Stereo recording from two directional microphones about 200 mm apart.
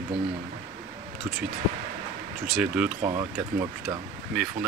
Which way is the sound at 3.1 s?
15° right (ahead or behind).